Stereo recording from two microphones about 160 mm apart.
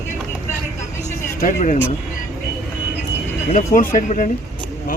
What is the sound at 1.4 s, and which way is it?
Speech, 55° left (ahead or behind).